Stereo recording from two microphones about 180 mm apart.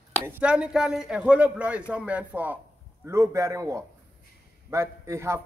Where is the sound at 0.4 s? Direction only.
5° right (ahead or behind).